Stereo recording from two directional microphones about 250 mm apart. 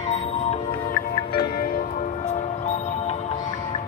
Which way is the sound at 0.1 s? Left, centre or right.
Left.